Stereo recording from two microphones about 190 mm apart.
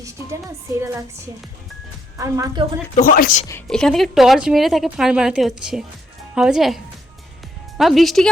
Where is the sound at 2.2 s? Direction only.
15° right (ahead or behind).